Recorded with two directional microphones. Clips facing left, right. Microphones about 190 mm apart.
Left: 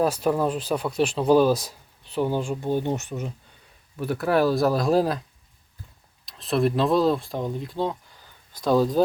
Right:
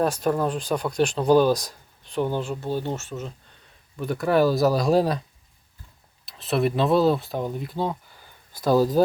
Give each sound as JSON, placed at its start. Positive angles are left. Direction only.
{"t": 0.0, "sound": "speech", "side_deg": 5}
{"t": 3.9, "sound": "speech", "side_deg": 5}
{"t": 6.2, "sound": "speech", "side_deg": 0}